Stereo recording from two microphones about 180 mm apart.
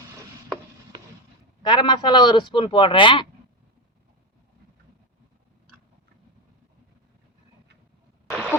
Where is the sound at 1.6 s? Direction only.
25° left (ahead or behind).